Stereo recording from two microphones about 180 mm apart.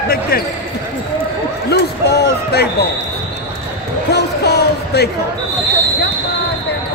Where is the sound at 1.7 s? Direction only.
65° left (ahead or behind).